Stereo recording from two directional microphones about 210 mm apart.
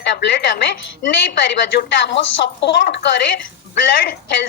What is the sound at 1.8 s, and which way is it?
Speech, 55° left (ahead or behind).